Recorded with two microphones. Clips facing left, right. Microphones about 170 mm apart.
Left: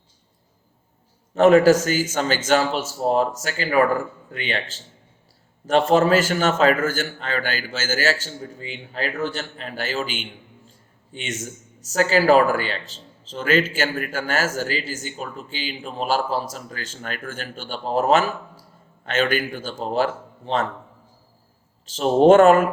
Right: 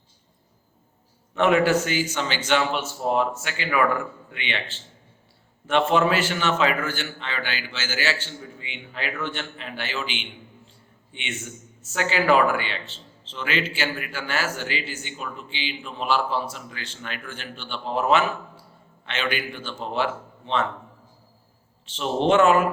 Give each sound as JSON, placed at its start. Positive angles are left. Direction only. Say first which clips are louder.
{"t": 1.3, "sound": "a man's voice", "louder": "left 6 dB", "side_deg": 40}
{"t": 21.8, "sound": "a man's voice", "louder": "left 8 dB", "side_deg": 40}